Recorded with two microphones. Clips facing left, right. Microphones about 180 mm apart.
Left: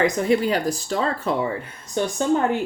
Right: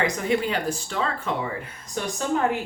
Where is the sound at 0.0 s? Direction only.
35° left (ahead or behind).